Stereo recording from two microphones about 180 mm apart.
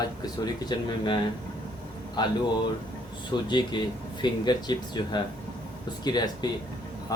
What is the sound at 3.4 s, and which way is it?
Speech, 25° left (ahead or behind).